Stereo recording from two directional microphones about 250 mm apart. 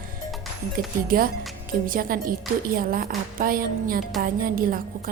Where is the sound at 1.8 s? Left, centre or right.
Right.